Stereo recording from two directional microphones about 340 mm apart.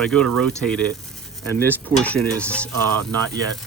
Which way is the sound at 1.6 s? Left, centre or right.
Centre.